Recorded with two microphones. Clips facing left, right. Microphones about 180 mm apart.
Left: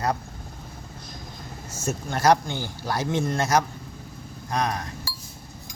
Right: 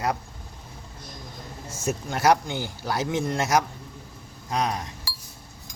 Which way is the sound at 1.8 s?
15° right (ahead or behind).